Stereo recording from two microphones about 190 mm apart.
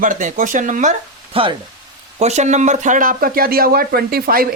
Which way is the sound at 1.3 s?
30° right (ahead or behind).